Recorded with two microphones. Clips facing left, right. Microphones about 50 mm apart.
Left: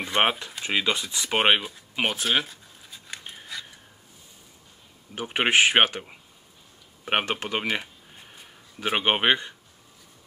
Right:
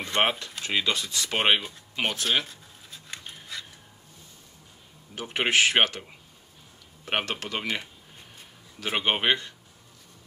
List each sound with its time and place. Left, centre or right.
0.0 s speech: centre
5.1 s speech: centre
7.6 s speech: centre